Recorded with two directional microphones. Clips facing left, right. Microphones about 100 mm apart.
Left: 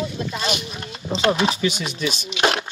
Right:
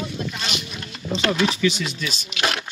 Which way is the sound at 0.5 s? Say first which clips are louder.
Left 1 dB; 30° left (ahead or behind).